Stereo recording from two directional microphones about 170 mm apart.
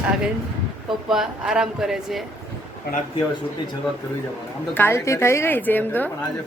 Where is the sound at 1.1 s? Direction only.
5° right (ahead or behind).